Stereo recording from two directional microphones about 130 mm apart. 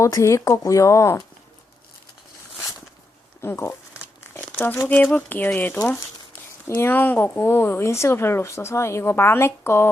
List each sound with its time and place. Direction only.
0.0 s speech: 25° left (ahead or behind)
3.4 s speech: 20° left (ahead or behind)
4.2 s crumpling: 15° left (ahead or behind)
5.1 s speech: 15° left (ahead or behind)